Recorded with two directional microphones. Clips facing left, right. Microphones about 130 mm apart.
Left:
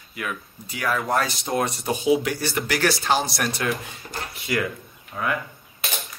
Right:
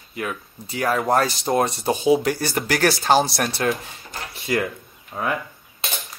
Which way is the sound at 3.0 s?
35° right (ahead or behind).